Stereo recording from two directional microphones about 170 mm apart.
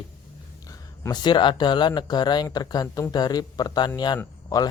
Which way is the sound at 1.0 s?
25° left (ahead or behind).